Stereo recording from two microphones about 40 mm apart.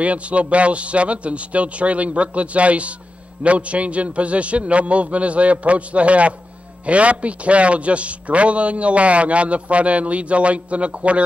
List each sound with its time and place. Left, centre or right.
0.0 s a man's voice: right